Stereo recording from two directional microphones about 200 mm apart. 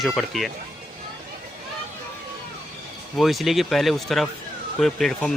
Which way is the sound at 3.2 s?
Centre (ahead or behind).